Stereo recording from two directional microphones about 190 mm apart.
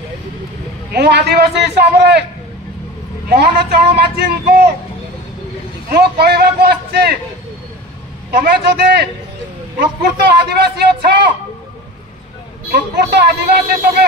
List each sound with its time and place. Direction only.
0.9 s speech: 60° right (ahead or behind)
3.3 s speech: 60° right (ahead or behind)
5.9 s speech: 55° right (ahead or behind)
8.3 s speech: 60° right (ahead or behind)
12.7 s speech: 60° right (ahead or behind)